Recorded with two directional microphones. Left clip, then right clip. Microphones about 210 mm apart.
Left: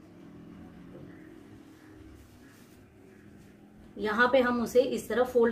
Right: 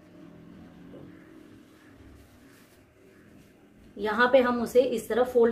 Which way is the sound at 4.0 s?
Centre (ahead or behind).